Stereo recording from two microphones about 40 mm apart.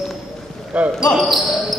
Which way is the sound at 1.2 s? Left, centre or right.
Centre.